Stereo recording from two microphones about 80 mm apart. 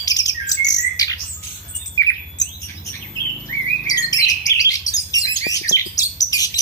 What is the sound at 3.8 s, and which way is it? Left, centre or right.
Bird, left.